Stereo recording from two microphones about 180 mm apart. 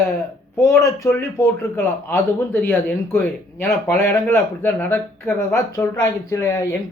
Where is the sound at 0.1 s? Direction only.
15° left (ahead or behind).